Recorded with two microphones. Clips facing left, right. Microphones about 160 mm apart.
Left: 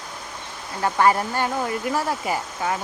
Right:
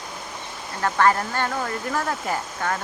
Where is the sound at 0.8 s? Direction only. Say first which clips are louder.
Left 1 dB; 15° left (ahead or behind).